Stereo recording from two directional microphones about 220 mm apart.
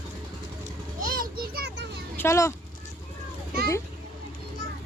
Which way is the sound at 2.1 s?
10° left (ahead or behind).